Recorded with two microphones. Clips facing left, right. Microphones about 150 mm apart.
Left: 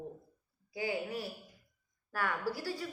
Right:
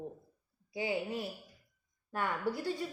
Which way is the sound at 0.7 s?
20° right (ahead or behind).